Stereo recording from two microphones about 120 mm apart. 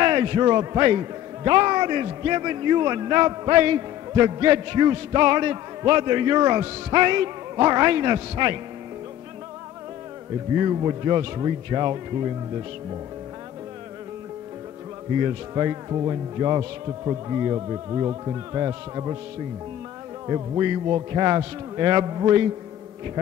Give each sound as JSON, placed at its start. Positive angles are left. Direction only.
{"t": 0.0, "sound": "a man's voice", "side_deg": -35}
{"t": 10.5, "sound": "a man's voice", "side_deg": -35}
{"t": 15.1, "sound": "a man's voice", "side_deg": -35}
{"t": 20.2, "sound": "a man's voice", "side_deg": -35}